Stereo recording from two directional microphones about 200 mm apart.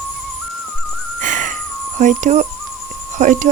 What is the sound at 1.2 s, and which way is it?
Whistling, 40° right (ahead or behind).